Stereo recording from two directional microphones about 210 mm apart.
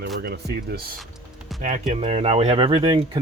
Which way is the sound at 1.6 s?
35° right (ahead or behind).